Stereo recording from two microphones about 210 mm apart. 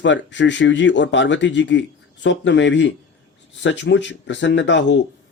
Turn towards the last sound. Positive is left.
turn(degrees=60)  # may be behind; listen again after turning